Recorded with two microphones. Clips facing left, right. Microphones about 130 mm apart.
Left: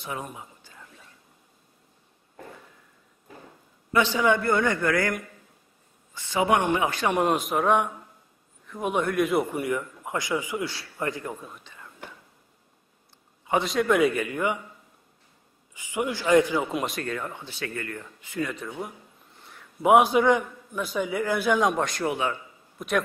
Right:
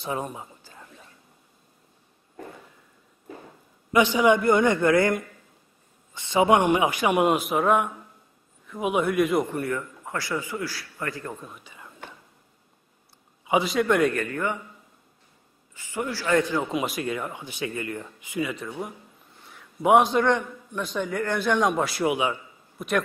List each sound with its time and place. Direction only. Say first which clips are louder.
0.0 s a sound: right 5 dB; 30° right (ahead or behind)
3.9 s a man's voice: right 3 dB; 15° right (ahead or behind); by 9.5 s centre (ahead or behind)
9.5 s a man's voice: left 1 dB; 15° left (ahead or behind)
11.4 s speech: right 1 dB; 5° right (ahead or behind)
13.5 s a man's voice: right 1 dB; 5° right (ahead or behind); by 14.6 s 15° left (ahead or behind)
15.7 s a man's voice: left 2 dB; 15° left (ahead or behind)
16.7 s speech: right 2 dB; 5° right (ahead or behind)
18.5 s a man's voice: right 1 dB; centre (ahead or behind)
19.4 s a sound: even; centre (ahead or behind)
20.1 s a man's voice: left 1 dB; 10° left (ahead or behind); by 22.4 s 10° right (ahead or behind)
22.8 s a man's voice: right 1 dB; centre (ahead or behind)